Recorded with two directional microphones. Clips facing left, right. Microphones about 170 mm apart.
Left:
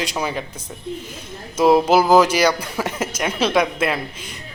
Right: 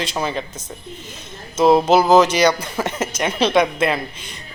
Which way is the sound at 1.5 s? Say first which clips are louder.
Right 1 dB; 10° left (ahead or behind).